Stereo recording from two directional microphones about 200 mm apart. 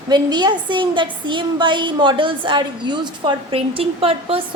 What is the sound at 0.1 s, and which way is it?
A woman's voice, 20° right (ahead or behind).